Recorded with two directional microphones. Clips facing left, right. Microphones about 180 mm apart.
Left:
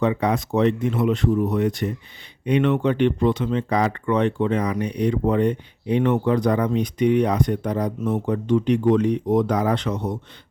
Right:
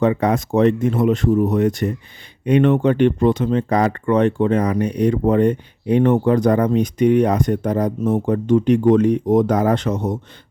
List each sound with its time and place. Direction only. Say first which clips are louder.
0.0 s speech: right 4 dB; 45° right (ahead or behind)